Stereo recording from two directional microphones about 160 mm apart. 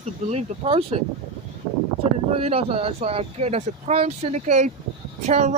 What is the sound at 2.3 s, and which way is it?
A woman's voice, 40° right (ahead or behind).